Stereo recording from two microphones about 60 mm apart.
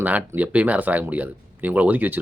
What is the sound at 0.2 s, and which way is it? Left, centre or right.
Speech, centre.